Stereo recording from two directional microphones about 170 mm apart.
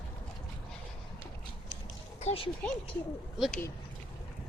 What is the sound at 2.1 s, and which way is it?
Speech, 35° left (ahead or behind).